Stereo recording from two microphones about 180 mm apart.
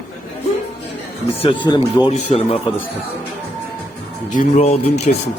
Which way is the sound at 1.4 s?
30° left (ahead or behind).